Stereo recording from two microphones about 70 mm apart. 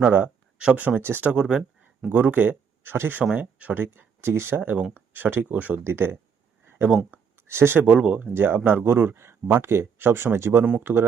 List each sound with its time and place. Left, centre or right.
0.6 s speech: centre
1.3 s speech: centre
2.0 s speech: right
3.9 s speech: right
5.8 s speech: right
6.7 s a sound: right
7.9 s speech: centre
8.3 s speech: right
10.7 s speech: right